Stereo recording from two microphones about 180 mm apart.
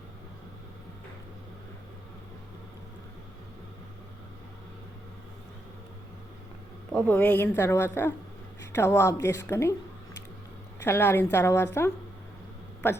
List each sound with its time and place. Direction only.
6.9 s a woman's voice: 10° left (ahead or behind)
10.8 s a woman's voice: 15° left (ahead or behind)